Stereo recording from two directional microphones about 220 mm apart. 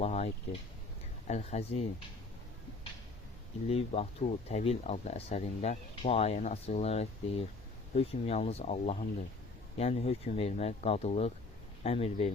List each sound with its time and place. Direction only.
0.0 s speech: 30° left (ahead or behind)
1.3 s speech: 30° left (ahead or behind)
3.7 s speech: 25° left (ahead or behind)